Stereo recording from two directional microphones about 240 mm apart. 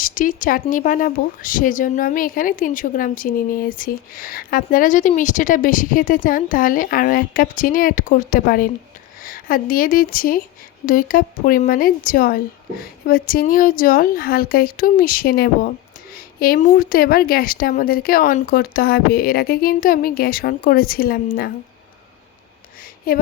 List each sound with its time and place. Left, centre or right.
0.0 s speech: left
23.1 s speech: left